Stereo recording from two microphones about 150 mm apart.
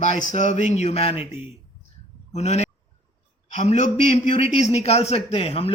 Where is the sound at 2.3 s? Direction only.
50° left (ahead or behind).